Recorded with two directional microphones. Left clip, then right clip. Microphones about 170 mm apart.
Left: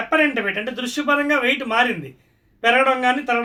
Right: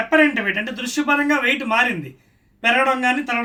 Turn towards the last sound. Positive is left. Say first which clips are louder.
# left 1 dB
turn(degrees=20)  # may be behind; listen again after turning